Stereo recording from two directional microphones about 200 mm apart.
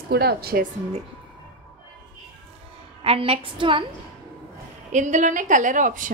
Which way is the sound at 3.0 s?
30° right (ahead or behind).